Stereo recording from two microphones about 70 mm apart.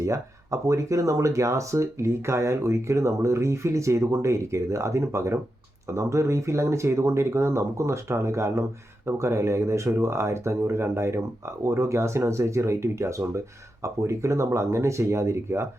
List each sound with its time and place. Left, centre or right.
0.0 s speech: right